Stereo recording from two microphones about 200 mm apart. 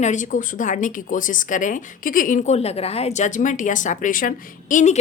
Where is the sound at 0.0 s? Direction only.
40° left (ahead or behind).